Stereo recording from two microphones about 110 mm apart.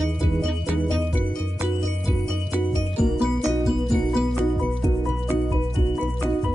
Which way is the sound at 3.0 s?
Centre (ahead or behind).